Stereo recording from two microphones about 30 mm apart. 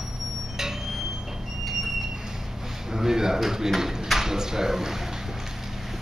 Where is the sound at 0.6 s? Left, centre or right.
Centre.